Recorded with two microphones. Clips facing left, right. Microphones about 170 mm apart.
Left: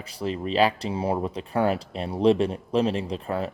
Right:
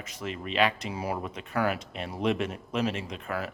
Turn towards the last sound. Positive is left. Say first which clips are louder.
# left 6 dB
turn(degrees=30)  # may be behind; listen again after turning